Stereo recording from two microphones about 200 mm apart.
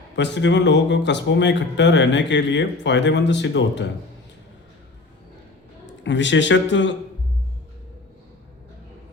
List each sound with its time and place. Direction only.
0.2 s speech: 60° left (ahead or behind)
5.8 s a man's voice: 65° left (ahead or behind)